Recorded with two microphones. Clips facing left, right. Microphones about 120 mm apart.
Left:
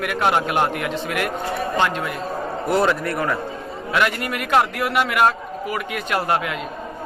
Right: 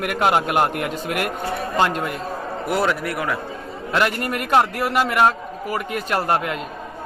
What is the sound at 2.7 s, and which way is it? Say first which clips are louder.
Speech: left 2 dB; 5° right (ahead or behind).